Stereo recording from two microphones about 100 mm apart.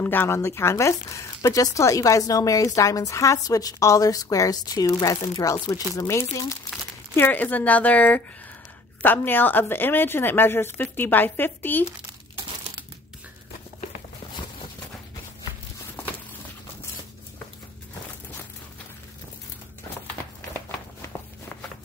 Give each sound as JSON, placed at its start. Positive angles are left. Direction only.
{"t": 0.0, "sound": "speech", "side_deg": 20}
{"t": 7.2, "sound": "a woman's voice", "side_deg": 20}